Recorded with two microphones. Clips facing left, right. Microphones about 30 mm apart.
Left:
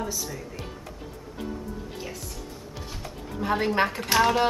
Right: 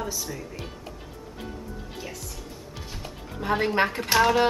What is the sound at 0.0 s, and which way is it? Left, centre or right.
Speech, centre.